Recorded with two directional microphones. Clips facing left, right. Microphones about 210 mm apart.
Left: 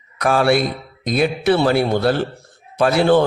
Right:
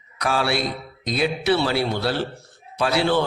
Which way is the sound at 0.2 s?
50° left (ahead or behind).